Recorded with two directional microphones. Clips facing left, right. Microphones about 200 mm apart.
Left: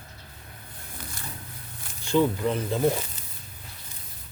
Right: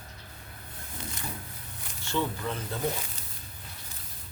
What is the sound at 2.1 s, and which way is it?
Speech, 15° left (ahead or behind).